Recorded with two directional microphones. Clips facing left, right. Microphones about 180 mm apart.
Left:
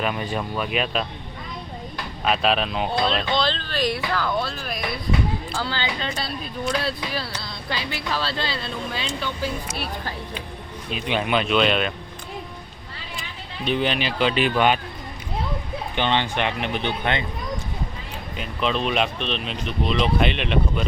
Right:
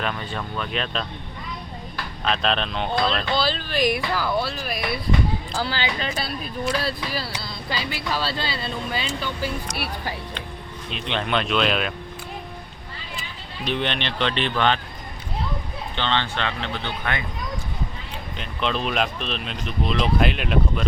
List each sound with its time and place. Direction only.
0.0 s speech: 10° left (ahead or behind)
2.2 s speech: 5° left (ahead or behind)
6.0 s speech: 5° right (ahead or behind)
10.9 s speech: 5° left (ahead or behind)
13.7 s speech: 5° left (ahead or behind)
16.0 s speech: 15° left (ahead or behind)
18.3 s speech: centre (ahead or behind)